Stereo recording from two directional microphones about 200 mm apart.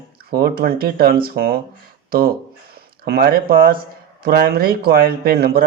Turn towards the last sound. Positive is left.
turn(degrees=-50)  # may be behind; listen again after turning